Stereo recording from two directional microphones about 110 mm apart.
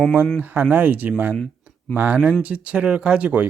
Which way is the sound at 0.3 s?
15° right (ahead or behind).